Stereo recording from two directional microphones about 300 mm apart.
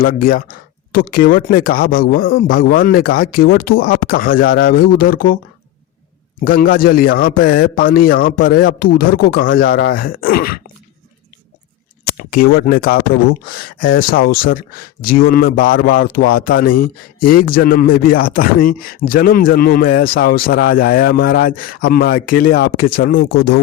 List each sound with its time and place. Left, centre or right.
0.0 s speech: left
6.4 s speech: left
12.0 s speech: left